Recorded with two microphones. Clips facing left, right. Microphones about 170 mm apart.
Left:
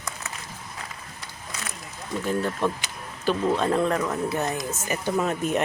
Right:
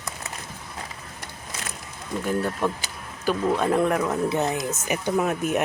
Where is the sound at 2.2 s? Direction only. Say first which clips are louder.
Even; 10° right (ahead or behind).